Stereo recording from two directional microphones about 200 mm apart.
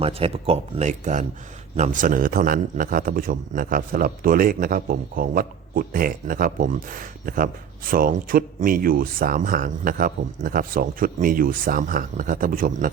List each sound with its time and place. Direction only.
0.0 s speech: 30° right (ahead or behind); by 12.9 s 45° right (ahead or behind)